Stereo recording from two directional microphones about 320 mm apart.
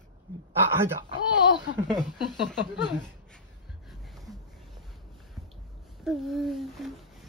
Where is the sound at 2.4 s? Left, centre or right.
Left.